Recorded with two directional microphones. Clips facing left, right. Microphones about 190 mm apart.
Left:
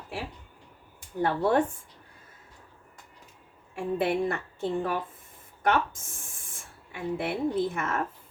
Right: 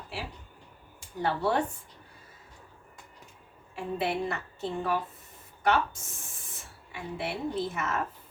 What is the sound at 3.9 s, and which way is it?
A woman's voice, 50° left (ahead or behind).